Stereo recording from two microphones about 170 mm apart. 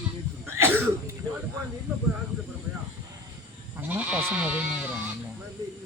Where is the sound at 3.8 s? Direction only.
10° right (ahead or behind).